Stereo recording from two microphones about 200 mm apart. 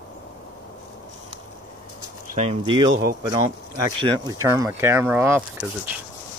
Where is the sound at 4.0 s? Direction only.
20° right (ahead or behind).